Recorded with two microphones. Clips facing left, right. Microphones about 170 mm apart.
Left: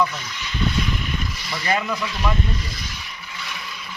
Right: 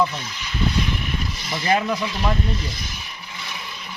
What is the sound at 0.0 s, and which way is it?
Speech, 25° right (ahead or behind).